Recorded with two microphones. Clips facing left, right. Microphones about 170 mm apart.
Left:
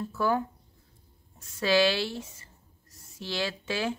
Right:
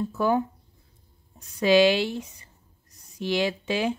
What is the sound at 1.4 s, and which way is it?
Speech, 15° right (ahead or behind).